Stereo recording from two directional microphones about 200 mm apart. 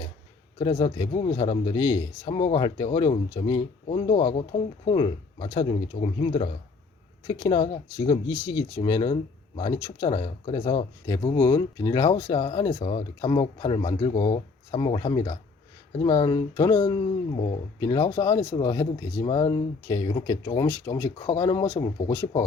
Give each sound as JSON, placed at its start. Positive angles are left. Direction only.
{"t": 0.6, "sound": "a man's voice", "side_deg": 30}
{"t": 11.0, "sound": "speech", "side_deg": 15}